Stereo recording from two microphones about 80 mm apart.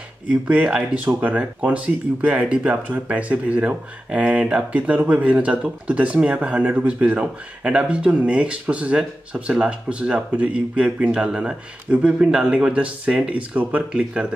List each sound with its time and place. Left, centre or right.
0.3 s speech: centre